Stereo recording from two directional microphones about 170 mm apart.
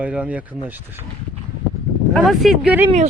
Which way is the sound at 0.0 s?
5° right (ahead or behind).